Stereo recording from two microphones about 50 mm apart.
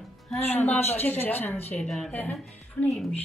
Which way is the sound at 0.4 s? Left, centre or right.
Left.